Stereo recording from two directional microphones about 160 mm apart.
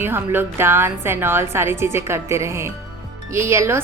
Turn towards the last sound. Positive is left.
turn(degrees=-15)  # may be behind; listen again after turning